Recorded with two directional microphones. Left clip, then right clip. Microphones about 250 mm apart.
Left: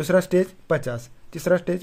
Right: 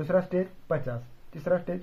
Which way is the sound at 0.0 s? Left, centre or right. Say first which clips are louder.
Left 7 dB; left.